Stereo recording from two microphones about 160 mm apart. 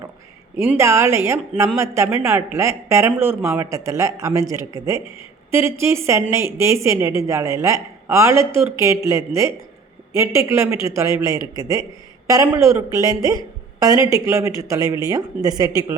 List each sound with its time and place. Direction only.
0.5 s speech: 15° right (ahead or behind)